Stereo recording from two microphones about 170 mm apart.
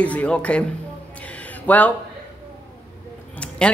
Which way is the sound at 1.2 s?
10° left (ahead or behind).